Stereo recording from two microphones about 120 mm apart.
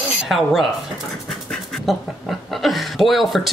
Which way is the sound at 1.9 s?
Centre (ahead or behind).